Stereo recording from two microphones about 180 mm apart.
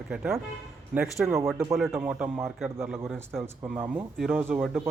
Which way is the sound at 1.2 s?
15° right (ahead or behind).